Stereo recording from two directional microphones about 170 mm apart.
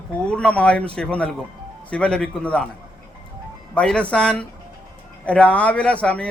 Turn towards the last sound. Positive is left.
turn(degrees=5)  # may be behind; listen again after turning